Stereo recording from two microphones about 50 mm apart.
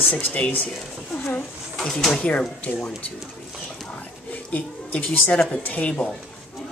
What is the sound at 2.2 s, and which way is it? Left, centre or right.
Speech, left.